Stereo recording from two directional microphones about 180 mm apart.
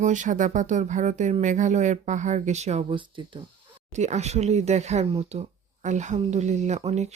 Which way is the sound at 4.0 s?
40° right (ahead or behind).